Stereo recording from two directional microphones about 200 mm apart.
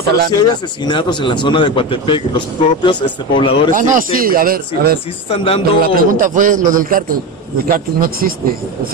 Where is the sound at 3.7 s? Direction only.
40° right (ahead or behind).